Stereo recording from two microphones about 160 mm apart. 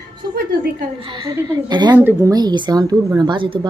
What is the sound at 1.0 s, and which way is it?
A woman's voice, 30° right (ahead or behind).